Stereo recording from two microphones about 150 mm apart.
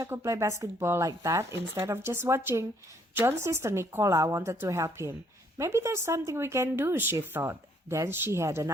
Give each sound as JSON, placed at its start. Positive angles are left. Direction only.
{"t": 0.0, "sound": "speech", "side_deg": -20}